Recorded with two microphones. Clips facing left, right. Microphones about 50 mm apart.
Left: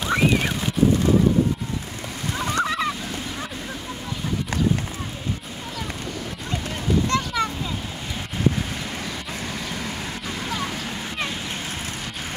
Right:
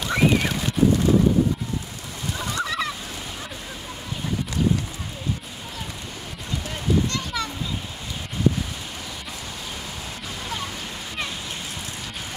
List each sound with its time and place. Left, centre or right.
0.0 s horse: centre
2.3 s fowl: left
2.6 s goose: centre
7.1 s a sound: left